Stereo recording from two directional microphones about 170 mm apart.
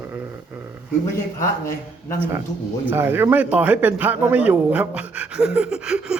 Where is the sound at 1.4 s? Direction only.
15° left (ahead or behind).